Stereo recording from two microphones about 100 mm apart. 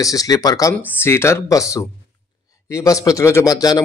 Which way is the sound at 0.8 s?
25° left (ahead or behind).